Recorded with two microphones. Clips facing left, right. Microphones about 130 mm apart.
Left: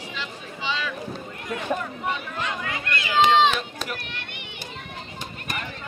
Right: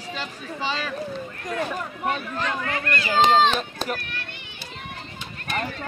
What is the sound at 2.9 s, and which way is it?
Speech, 35° right (ahead or behind).